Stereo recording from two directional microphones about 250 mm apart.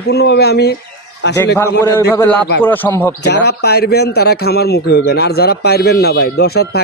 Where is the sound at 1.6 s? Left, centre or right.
Centre.